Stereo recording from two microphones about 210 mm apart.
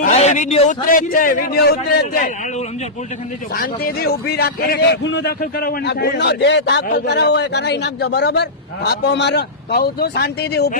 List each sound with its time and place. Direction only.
0.0 s a man's voice: 30° left (ahead or behind); by 10.8 s 50° left (ahead or behind)